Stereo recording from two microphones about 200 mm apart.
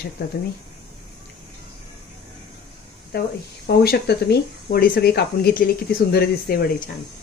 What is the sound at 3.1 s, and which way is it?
Speech, 55° left (ahead or behind).